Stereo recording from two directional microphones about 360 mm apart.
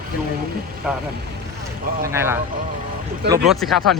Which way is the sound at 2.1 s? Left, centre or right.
Centre.